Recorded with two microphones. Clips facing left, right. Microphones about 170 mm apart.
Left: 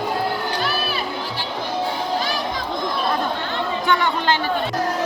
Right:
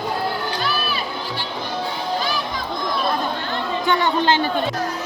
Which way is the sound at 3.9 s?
20° right (ahead or behind).